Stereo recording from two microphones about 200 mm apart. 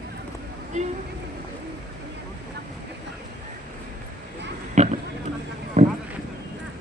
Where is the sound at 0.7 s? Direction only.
35° right (ahead or behind).